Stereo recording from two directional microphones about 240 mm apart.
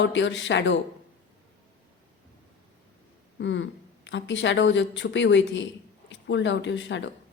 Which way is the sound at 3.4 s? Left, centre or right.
Left.